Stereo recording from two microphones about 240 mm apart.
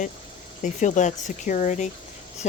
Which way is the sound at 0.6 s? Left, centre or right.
Left.